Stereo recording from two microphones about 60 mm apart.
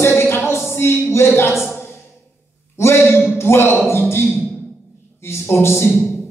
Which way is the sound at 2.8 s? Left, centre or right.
Left.